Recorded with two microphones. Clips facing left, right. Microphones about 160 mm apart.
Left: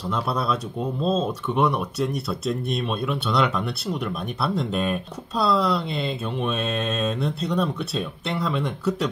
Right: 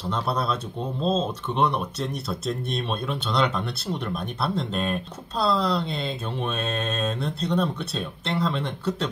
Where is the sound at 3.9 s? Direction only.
35° right (ahead or behind).